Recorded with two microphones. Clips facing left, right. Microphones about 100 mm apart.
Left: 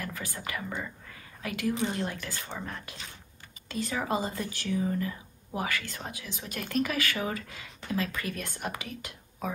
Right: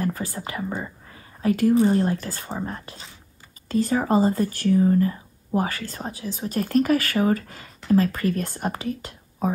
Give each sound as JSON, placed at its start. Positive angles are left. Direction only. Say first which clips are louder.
{"t": 0.0, "sound": "speech", "louder": "right 10 dB", "side_deg": -40}